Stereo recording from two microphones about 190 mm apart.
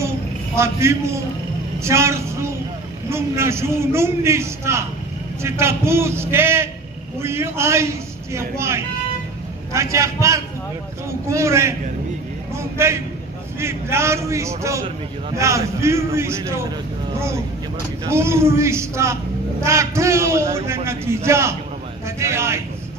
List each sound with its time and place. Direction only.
0.5 s a man's voice: 15° right (ahead or behind)